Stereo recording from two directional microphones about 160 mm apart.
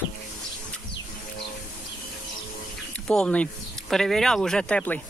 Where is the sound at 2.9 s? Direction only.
5° left (ahead or behind).